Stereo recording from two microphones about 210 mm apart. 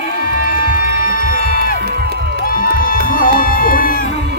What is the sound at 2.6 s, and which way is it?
Music, 40° left (ahead or behind).